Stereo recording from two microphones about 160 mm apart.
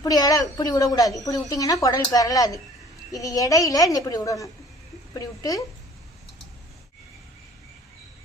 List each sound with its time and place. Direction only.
0.0 s a woman's voice: 20° left (ahead or behind)